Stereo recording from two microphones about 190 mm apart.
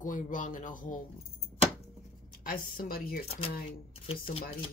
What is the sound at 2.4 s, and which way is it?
Speech, 50° left (ahead or behind).